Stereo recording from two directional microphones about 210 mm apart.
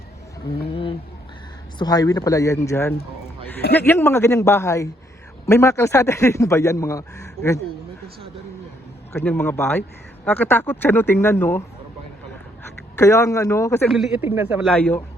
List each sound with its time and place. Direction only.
0.7 s a sound: 25° left (ahead or behind)
1.8 s a man's voice: 20° left (ahead or behind)
9.1 s a man's voice: 10° left (ahead or behind)
13.0 s a man's voice: 15° left (ahead or behind)
13.9 s speech: centre (ahead or behind)
14.7 s a man's voice: 5° left (ahead or behind)